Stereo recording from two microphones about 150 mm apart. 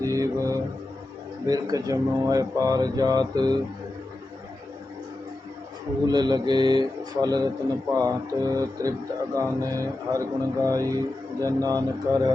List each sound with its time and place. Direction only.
0.0 s mantra: 20° right (ahead or behind)
1.5 s speech: 25° right (ahead or behind)
6.1 s speech: 30° right (ahead or behind)